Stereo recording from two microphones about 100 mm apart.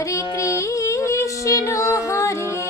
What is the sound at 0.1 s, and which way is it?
Music, 30° left (ahead or behind).